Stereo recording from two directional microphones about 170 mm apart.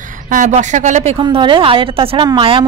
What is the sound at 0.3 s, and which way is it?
Speech, 45° right (ahead or behind).